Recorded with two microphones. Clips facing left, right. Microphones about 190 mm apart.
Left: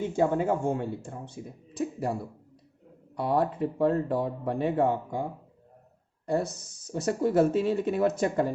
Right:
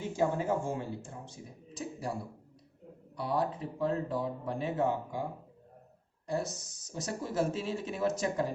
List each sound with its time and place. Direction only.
0.2 s speech: 60° left (ahead or behind)
3.2 s speech: 55° left (ahead or behind)
6.2 s speech: 55° left (ahead or behind)